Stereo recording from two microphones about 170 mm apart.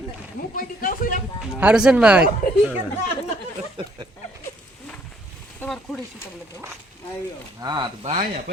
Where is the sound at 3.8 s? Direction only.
30° right (ahead or behind).